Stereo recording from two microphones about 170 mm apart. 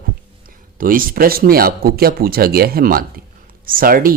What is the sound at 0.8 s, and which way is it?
Speech, 55° right (ahead or behind).